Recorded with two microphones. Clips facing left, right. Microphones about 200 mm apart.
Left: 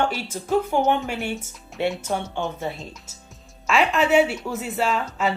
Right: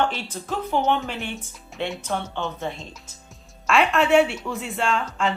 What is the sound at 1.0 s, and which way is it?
Speech, 45° left (ahead or behind).